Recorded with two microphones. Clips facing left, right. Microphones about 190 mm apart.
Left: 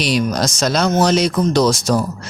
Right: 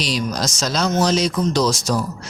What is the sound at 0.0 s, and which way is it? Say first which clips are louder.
Speech: left 5 dB; 60° left (ahead or behind).